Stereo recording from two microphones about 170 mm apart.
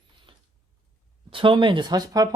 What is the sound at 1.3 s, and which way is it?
Speech, 30° right (ahead or behind).